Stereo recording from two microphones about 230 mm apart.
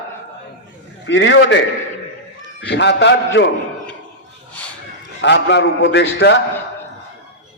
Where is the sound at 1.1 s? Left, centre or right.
Left.